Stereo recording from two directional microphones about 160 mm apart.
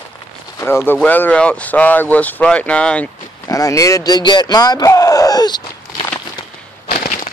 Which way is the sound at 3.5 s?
20° left (ahead or behind).